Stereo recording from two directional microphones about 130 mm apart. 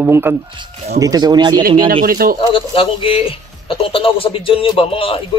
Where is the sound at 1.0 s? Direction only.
30° right (ahead or behind).